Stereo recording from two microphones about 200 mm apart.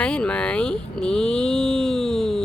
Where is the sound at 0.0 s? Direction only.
5° left (ahead or behind).